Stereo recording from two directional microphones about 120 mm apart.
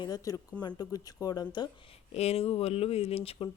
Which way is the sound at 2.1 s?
60° left (ahead or behind).